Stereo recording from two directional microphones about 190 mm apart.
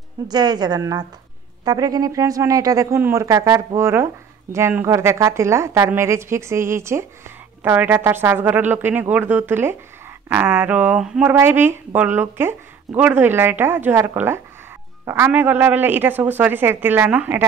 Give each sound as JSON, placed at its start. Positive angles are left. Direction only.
{"t": 0.3, "sound": "a woman's voice", "side_deg": -20}